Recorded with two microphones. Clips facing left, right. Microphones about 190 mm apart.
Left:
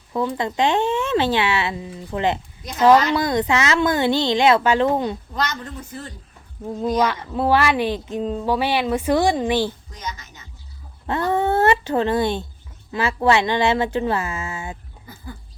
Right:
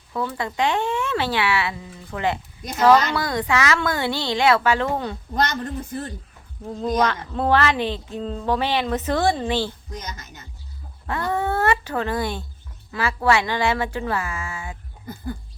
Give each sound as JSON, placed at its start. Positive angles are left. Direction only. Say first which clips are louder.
{"t": 0.1, "sound": "a woman's voice", "louder": "left 4 dB", "side_deg": 20}
{"t": 5.3, "sound": "a woman's voice", "louder": "right 3 dB", "side_deg": -50}
{"t": 6.8, "sound": "a woman's voice", "louder": "left 1 dB", "side_deg": 10}
{"t": 11.0, "sound": "a sound", "louder": "left 4 dB", "side_deg": 25}
{"t": 12.9, "sound": "a woman's voice", "louder": "left 2 dB", "side_deg": 25}